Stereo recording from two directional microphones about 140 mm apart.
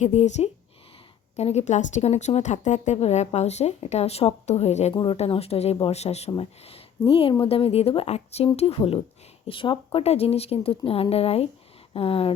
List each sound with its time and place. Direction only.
0.0 s speech: 55° left (ahead or behind)